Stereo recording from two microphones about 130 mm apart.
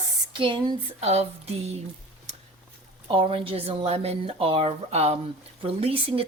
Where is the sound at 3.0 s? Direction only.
45° right (ahead or behind).